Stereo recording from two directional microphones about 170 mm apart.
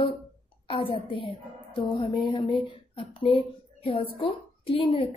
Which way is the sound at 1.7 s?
25° left (ahead or behind).